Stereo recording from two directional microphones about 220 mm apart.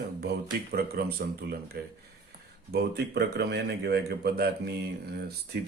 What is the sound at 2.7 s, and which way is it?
Speech, 45° right (ahead or behind).